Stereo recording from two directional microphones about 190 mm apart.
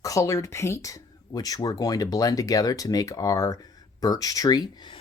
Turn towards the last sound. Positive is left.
turn(degrees=25)  # may be behind; listen again after turning